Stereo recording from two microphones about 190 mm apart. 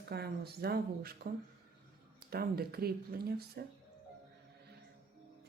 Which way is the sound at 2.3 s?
55° right (ahead or behind).